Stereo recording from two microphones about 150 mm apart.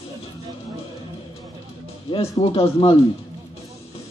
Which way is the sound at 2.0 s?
40° left (ahead or behind).